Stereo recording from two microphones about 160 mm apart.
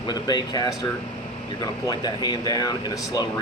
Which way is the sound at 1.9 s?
25° left (ahead or behind).